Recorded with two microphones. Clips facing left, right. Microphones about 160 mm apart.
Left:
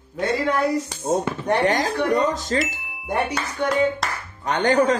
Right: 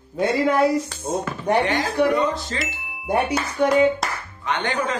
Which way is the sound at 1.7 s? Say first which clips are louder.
Right 1 dB; 40° left (ahead or behind).